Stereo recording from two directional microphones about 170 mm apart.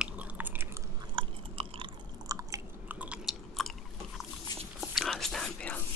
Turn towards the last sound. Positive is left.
turn(degrees=5)  # may be behind; listen again after turning